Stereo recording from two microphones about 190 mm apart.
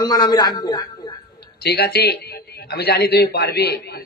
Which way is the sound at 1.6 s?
55° left (ahead or behind).